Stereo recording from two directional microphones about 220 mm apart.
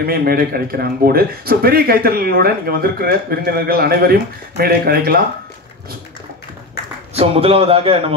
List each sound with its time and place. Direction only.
0.0 s a man's voice: 45° right (ahead or behind)
7.2 s a man's voice: 25° right (ahead or behind)